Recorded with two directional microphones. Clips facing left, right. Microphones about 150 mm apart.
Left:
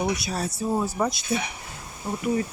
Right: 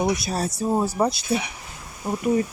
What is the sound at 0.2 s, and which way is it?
Speech, 40° right (ahead or behind).